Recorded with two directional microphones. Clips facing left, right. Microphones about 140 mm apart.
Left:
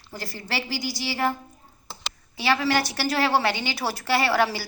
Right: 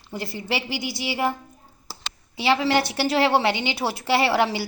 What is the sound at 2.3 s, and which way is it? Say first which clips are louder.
A woman's voice: right 2 dB; 20° right (ahead or behind).